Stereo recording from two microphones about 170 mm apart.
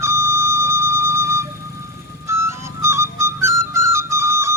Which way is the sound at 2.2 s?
15° right (ahead or behind).